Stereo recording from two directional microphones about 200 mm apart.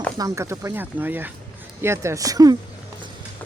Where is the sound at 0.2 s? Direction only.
15° right (ahead or behind).